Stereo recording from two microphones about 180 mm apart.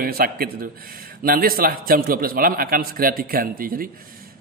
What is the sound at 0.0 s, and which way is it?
A man's voice, 55° right (ahead or behind).